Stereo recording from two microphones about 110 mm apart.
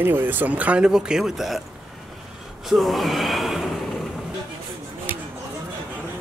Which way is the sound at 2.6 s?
Centre (ahead or behind).